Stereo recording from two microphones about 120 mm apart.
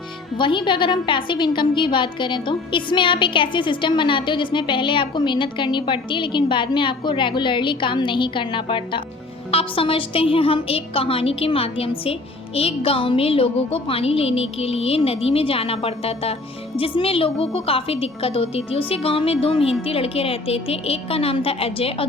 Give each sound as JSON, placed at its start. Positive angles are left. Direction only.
{"t": 0.3, "sound": "a woman's voice", "side_deg": 40}